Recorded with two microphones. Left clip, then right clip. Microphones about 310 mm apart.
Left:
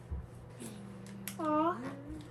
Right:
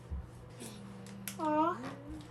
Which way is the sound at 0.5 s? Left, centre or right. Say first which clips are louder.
Even; centre.